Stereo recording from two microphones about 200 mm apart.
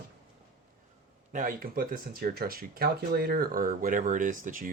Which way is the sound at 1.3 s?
40° right (ahead or behind).